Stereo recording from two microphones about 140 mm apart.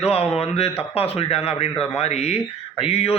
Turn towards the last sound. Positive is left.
turn(degrees=45)  # may be behind; listen again after turning